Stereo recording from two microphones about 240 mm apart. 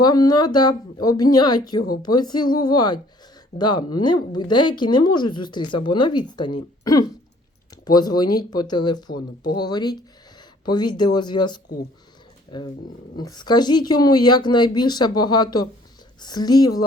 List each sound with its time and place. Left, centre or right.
0.0 s speech: centre